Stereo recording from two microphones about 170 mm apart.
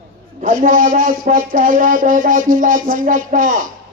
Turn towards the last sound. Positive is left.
turn(degrees=-50)  # may be behind; listen again after turning